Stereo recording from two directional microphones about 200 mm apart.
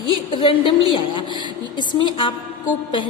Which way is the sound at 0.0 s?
25° left (ahead or behind).